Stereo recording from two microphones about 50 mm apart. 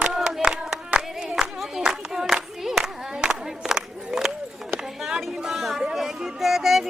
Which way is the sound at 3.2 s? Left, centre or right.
Centre.